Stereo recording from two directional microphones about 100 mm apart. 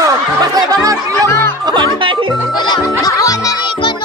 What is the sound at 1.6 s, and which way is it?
Speech, 55° right (ahead or behind).